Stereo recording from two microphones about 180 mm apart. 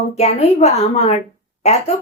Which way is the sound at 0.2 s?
35° left (ahead or behind).